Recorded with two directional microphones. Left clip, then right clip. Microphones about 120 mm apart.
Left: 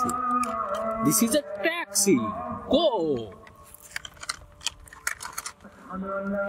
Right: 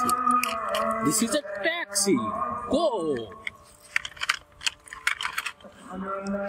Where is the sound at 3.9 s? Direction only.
10° left (ahead or behind).